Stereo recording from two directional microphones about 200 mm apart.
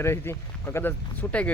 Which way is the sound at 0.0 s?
10° left (ahead or behind).